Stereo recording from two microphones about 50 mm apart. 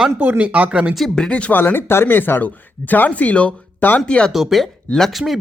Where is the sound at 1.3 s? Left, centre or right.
Left.